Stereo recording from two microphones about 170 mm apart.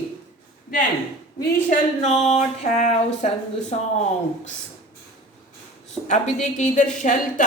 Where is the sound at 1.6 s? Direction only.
40° left (ahead or behind).